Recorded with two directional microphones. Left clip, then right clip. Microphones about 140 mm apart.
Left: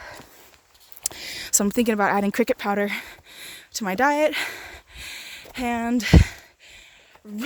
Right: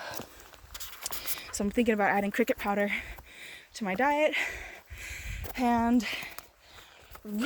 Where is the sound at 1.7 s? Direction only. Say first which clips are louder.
Left 4 dB; 75° left (ahead or behind).